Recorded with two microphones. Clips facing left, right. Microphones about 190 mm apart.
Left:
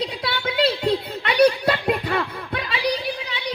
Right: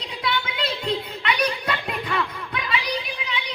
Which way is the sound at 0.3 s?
35° left (ahead or behind).